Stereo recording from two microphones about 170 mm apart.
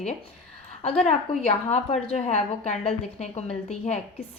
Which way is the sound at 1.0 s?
40° left (ahead or behind).